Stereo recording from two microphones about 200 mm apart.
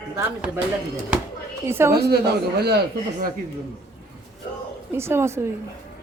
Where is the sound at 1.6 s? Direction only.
15° right (ahead or behind).